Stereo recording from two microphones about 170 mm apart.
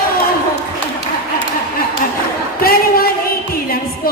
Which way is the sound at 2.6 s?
60° left (ahead or behind).